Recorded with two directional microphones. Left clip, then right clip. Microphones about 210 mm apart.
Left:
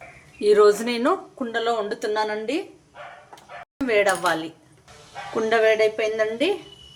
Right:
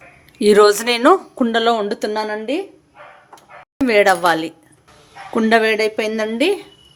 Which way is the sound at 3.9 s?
45° right (ahead or behind).